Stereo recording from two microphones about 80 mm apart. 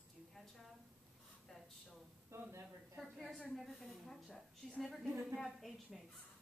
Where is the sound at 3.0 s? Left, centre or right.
Centre.